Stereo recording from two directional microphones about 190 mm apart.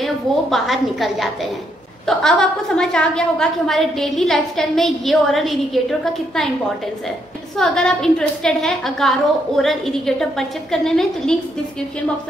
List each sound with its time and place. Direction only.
0.0 s a woman's voice: centre (ahead or behind)
7.5 s a woman's voice: 5° left (ahead or behind)